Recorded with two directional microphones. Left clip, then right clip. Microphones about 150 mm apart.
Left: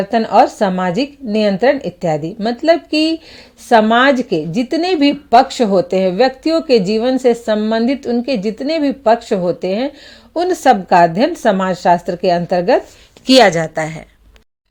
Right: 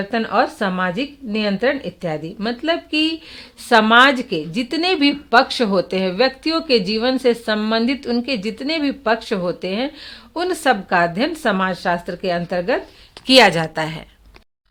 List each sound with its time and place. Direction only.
0.1 s speech: 45° left (ahead or behind)
13.4 s speech: 20° left (ahead or behind)